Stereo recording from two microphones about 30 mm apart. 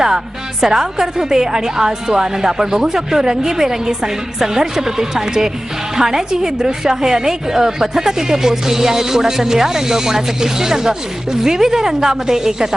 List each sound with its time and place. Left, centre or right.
0.6 s a woman's voice: centre